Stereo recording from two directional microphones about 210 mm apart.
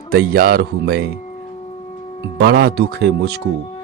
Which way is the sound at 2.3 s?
50° right (ahead or behind).